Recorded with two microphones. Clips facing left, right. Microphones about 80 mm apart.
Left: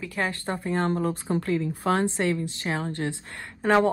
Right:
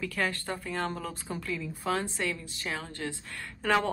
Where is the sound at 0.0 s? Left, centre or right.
Left.